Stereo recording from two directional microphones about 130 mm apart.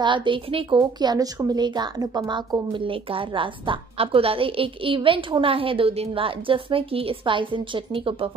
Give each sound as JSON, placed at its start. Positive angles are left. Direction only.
{"t": 0.0, "sound": "a woman's voice", "side_deg": -35}